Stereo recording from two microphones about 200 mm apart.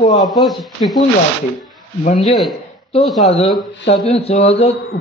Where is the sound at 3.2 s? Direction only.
30° left (ahead or behind).